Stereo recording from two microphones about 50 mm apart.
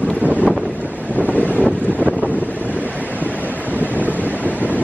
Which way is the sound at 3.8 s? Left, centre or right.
Right.